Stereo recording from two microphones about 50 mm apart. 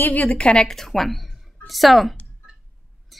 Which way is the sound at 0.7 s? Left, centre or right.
Centre.